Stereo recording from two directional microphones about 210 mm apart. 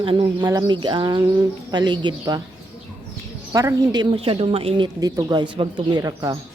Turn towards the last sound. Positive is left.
turn(degrees=-15)  # may be behind; listen again after turning